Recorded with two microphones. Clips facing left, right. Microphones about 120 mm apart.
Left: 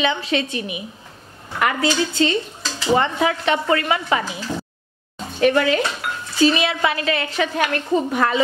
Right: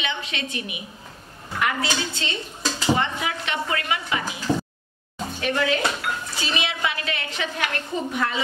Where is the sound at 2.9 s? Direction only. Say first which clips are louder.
Left 7 dB; 40° left (ahead or behind).